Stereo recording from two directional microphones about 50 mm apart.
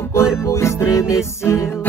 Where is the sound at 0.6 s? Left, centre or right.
Left.